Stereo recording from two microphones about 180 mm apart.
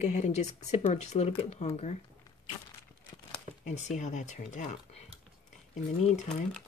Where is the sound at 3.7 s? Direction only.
40° left (ahead or behind).